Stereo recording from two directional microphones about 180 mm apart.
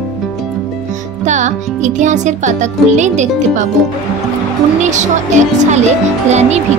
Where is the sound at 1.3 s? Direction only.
40° right (ahead or behind).